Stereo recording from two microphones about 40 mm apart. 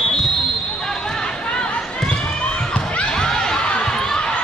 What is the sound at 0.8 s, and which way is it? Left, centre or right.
Chatter, centre.